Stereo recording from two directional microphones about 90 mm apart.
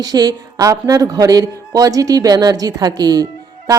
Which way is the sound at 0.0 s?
50° right (ahead or behind).